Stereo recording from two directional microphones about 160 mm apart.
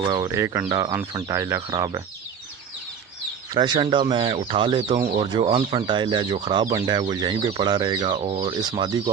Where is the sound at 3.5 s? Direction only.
30° right (ahead or behind).